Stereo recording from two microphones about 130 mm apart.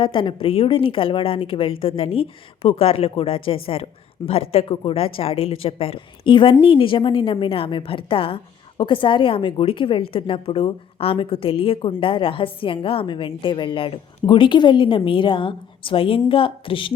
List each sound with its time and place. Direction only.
0.0 s a woman's voice: 40° left (ahead or behind)